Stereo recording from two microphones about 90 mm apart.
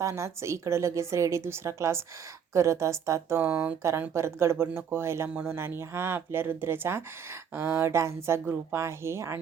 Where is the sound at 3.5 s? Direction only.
15° right (ahead or behind).